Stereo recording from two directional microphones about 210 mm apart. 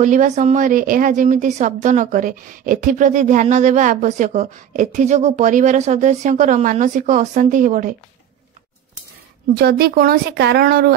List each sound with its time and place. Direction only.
0.0 s a woman's voice: 35° right (ahead or behind)
9.6 s speech: 50° right (ahead or behind)